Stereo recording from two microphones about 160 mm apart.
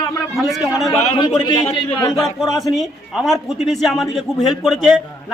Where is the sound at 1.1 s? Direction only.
30° left (ahead or behind).